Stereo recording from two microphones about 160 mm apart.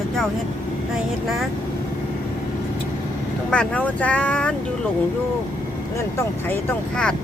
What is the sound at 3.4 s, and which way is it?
Speech, 5° left (ahead or behind).